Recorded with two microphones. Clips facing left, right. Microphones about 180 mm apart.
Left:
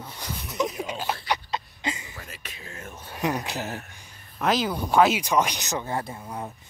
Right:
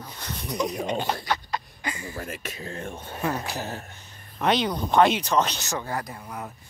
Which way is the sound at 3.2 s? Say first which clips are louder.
Left 1 dB; 15° left (ahead or behind).